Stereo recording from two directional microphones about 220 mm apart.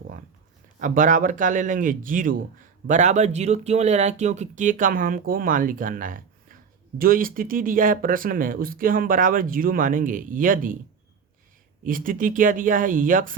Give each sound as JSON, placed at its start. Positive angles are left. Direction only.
{"t": 0.8, "sound": "speech", "side_deg": -35}
{"t": 11.8, "sound": "speech", "side_deg": -40}